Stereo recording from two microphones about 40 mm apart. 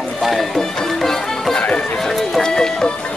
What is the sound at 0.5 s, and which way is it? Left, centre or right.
Music, centre.